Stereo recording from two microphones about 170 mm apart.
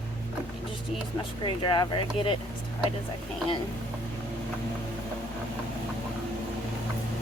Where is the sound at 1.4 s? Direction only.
30° left (ahead or behind).